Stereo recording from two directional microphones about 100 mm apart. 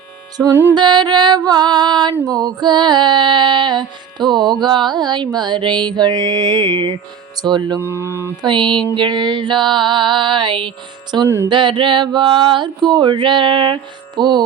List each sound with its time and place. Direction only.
0.7 s music: 50° right (ahead or behind)
7.8 s speech: 25° right (ahead or behind)
8.4 s music: 50° right (ahead or behind)